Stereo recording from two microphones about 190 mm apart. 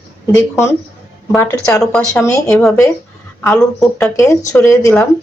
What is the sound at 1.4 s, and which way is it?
Speech, 15° left (ahead or behind).